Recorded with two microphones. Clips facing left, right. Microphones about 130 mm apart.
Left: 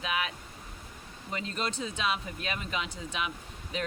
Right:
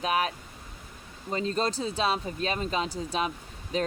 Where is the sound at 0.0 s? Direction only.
40° right (ahead or behind).